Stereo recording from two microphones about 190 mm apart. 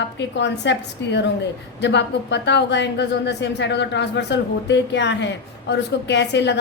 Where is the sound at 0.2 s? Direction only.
65° left (ahead or behind).